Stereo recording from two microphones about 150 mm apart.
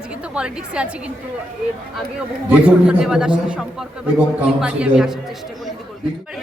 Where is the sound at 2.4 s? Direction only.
5° right (ahead or behind).